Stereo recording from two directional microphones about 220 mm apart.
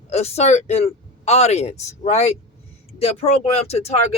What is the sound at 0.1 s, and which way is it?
Speech, 30° left (ahead or behind).